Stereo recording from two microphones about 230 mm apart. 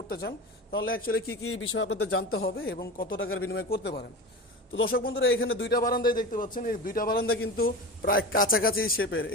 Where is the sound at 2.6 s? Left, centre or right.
Left.